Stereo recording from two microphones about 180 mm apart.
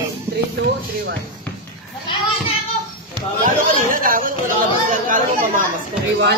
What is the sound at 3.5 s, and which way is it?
Speech, 50° right (ahead or behind).